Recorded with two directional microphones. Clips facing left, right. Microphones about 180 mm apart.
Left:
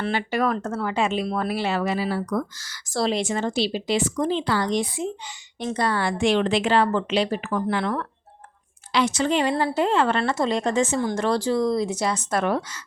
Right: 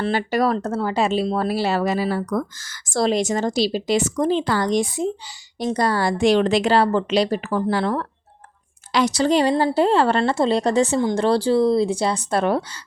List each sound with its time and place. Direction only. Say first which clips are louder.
0.0 s a woman's voice: right 4 dB; 40° right (ahead or behind)